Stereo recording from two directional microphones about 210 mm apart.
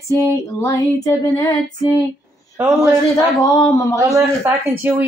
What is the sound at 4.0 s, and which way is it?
Speech, 15° right (ahead or behind).